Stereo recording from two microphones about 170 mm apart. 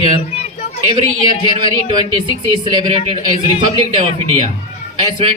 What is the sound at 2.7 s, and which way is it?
Speech, 30° right (ahead or behind).